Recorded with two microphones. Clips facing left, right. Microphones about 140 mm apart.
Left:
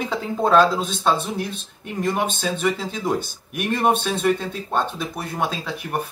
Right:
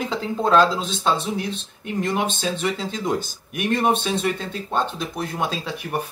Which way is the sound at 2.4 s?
Centre (ahead or behind).